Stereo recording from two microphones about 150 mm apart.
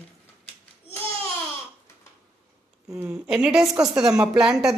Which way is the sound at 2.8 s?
20° right (ahead or behind).